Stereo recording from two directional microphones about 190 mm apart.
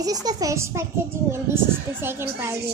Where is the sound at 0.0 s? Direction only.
20° right (ahead or behind).